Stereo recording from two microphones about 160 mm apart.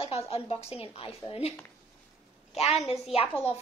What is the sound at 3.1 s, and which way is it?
Speech, 35° left (ahead or behind).